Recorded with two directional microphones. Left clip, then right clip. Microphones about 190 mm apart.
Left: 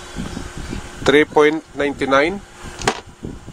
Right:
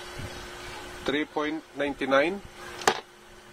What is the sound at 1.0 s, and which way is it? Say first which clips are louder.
Speech: left 16 dB; 35° left (ahead or behind).